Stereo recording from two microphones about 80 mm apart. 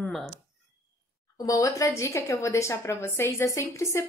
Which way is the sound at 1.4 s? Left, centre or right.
Left.